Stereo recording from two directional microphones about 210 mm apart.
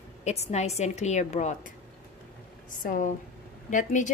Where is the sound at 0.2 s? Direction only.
30° left (ahead or behind).